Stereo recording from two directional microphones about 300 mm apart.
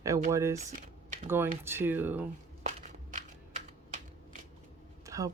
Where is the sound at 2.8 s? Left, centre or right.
Right.